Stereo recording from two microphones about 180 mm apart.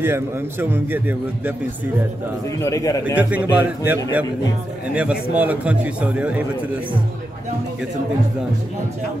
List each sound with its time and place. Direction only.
0.0 s a man's voice: 10° right (ahead or behind)
2.6 s a man's voice: 20° left (ahead or behind)
3.2 s a man's voice: 10° right (ahead or behind)